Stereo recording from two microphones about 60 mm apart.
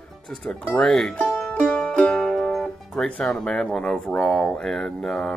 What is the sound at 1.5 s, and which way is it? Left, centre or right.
Music, centre.